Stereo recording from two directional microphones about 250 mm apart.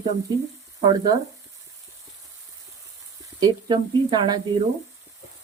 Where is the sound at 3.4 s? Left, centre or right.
Centre.